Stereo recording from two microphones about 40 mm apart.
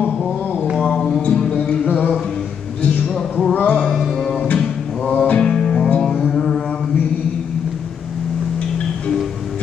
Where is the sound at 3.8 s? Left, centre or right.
Centre.